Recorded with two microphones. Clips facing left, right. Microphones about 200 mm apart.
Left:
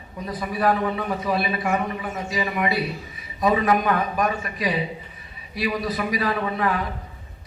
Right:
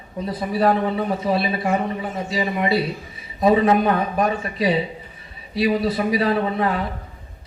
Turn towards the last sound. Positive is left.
turn(degrees=-30)  # may be behind; listen again after turning